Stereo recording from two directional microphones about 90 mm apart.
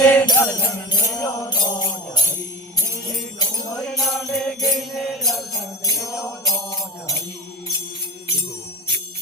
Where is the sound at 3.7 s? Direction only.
5° left (ahead or behind).